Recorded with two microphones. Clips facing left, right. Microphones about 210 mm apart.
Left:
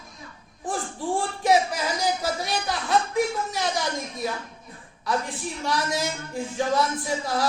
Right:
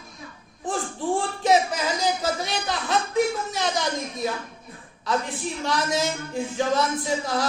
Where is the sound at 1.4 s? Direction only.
25° right (ahead or behind).